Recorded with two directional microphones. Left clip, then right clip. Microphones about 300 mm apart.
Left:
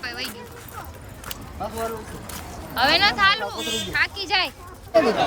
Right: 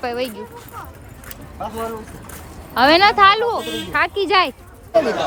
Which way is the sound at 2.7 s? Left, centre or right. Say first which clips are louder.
Right 6 dB; centre.